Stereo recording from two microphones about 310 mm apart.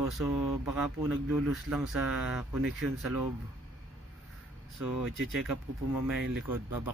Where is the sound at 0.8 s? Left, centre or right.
Centre.